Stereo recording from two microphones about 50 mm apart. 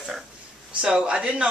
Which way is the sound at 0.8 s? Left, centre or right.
Centre.